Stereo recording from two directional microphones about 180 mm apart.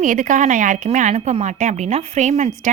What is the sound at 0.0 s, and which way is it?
A woman's voice, 45° right (ahead or behind).